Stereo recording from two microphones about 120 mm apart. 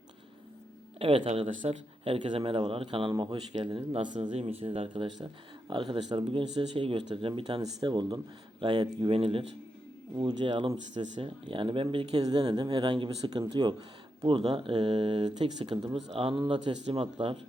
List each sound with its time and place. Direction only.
0.9 s speech: 50° right (ahead or behind)
1.3 s speech: 65° right (ahead or behind)
2.0 s speech: 45° right (ahead or behind)
7.6 s speech: 40° right (ahead or behind)
10.2 s speech: 40° right (ahead or behind)
16.4 s speech: 40° right (ahead or behind)